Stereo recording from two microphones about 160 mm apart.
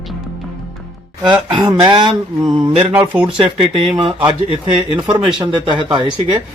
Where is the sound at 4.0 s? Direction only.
30° right (ahead or behind).